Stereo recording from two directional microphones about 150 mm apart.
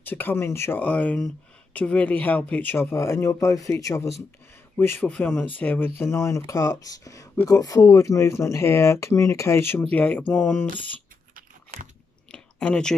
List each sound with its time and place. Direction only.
0.0 s speech: 10° left (ahead or behind)
11.3 s biting: 60° right (ahead or behind)
12.3 s a sound: 5° left (ahead or behind)